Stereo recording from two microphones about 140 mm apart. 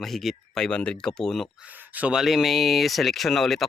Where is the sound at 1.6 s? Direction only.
10° right (ahead or behind).